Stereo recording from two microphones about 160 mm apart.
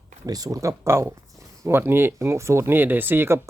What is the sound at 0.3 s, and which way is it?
Speech, 25° right (ahead or behind).